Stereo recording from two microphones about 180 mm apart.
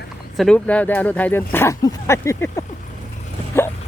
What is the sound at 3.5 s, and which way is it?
Dog, 15° left (ahead or behind).